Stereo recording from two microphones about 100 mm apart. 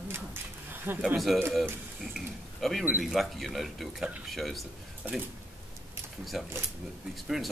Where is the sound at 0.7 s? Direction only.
20° right (ahead or behind).